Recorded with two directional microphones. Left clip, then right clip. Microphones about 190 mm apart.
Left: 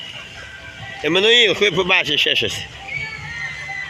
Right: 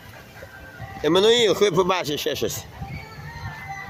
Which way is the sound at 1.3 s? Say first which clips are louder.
Left 4 dB; 70° right (ahead or behind).